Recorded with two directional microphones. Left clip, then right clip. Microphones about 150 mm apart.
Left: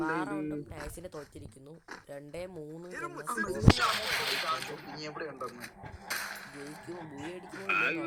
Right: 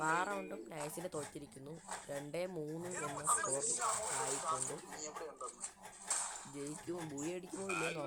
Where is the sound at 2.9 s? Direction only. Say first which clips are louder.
Left 3 dB; 20° left (ahead or behind).